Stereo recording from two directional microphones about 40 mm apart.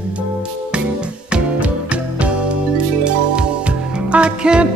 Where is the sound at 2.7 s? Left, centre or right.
Right.